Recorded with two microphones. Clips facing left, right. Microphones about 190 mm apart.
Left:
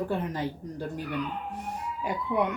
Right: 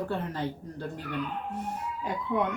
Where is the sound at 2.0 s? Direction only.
10° left (ahead or behind).